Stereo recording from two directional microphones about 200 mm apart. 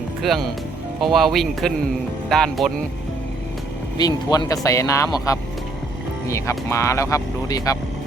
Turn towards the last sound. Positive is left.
turn(degrees=20)  # may be behind; listen again after turning